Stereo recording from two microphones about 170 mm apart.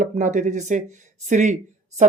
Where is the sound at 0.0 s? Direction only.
50° right (ahead or behind).